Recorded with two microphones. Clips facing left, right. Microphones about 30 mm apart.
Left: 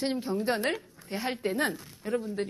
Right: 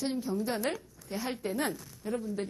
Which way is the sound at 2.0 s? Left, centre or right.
Left.